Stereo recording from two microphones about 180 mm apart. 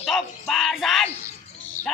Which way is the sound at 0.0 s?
Centre (ahead or behind).